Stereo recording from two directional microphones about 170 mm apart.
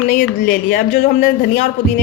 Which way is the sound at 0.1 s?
60° left (ahead or behind).